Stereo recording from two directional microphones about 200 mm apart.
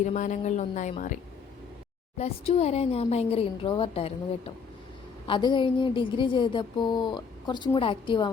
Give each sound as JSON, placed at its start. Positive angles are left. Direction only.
{"t": 0.0, "sound": "speech", "side_deg": 40}